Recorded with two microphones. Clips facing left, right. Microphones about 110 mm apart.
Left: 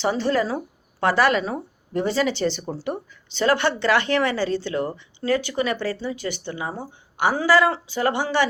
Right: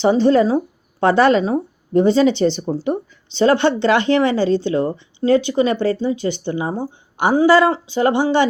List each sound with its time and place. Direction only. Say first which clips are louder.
0.0 s speech: right 8 dB; 25° right (ahead or behind)